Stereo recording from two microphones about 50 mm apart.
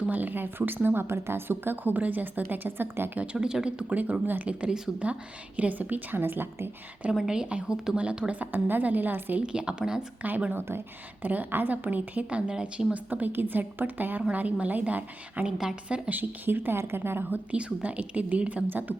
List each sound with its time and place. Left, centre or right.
0.1 s a woman's voice: right
3.4 s speech: centre
3.9 s a woman's voice: right
4.4 s a woman's voice: right
7.1 s a woman's voice: centre
8.4 s a woman's voice: right
9.4 s speech: centre
10.2 s a woman's voice: right
12.4 s speech: centre
12.9 s a woman's voice: right
17.3 s a woman's voice: right